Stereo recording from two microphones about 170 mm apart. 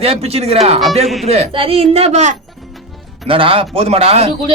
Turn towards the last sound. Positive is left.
turn(degrees=-35)  # may be behind; listen again after turning